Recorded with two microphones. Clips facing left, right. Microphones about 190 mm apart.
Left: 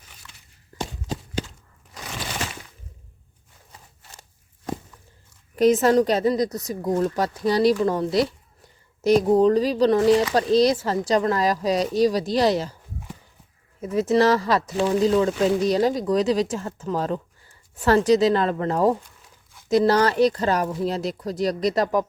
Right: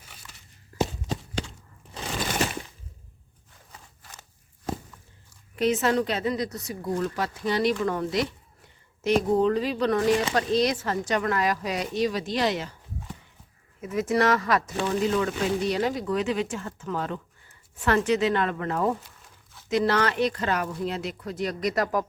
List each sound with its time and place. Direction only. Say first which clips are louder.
1.0 s a sound: left 2 dB; centre (ahead or behind)
5.5 s speech: left 6 dB; 40° left (ahead or behind)
13.8 s speech: left 5 dB; 30° left (ahead or behind)